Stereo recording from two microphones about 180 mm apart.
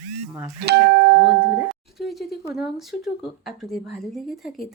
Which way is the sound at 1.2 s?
5° right (ahead or behind).